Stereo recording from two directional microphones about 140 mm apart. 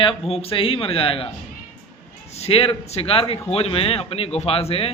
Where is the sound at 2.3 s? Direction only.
45° left (ahead or behind).